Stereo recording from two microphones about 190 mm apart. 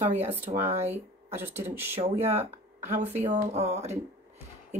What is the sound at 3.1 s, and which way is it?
Speech, 35° right (ahead or behind).